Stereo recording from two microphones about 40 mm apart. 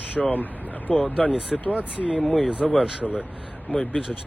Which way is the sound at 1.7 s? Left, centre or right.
Right.